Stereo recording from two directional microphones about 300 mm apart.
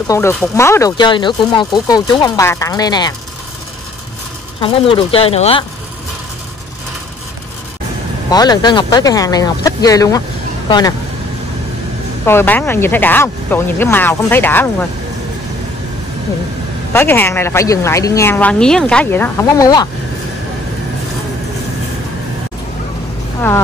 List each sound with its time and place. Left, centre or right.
0.0 s speech: centre
4.6 s speech: centre
8.3 s speech: centre
12.3 s speech: centre
16.9 s speech: centre